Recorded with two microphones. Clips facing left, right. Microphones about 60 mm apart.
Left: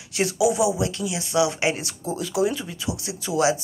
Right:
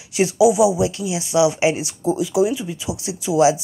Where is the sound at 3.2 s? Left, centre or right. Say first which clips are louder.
Right 6 dB; centre.